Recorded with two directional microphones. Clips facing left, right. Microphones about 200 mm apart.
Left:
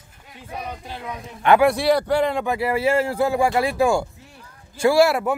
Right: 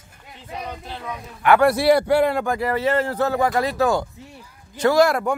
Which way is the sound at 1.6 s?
5° right (ahead or behind).